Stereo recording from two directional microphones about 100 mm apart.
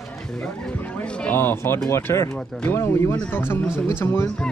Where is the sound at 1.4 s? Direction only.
25° left (ahead or behind).